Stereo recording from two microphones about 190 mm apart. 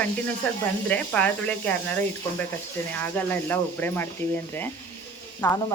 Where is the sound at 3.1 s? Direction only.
10° left (ahead or behind).